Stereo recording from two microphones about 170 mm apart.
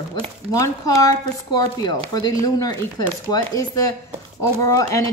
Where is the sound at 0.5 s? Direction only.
20° left (ahead or behind).